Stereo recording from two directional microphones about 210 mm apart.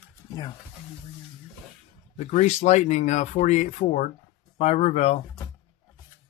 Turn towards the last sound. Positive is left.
turn(degrees=30)  # may be behind; listen again after turning